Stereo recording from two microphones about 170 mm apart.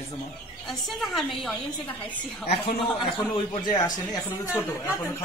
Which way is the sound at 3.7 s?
20° left (ahead or behind).